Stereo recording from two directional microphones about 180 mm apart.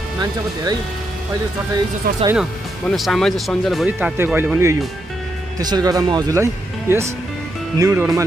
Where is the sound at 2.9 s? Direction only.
Centre (ahead or behind).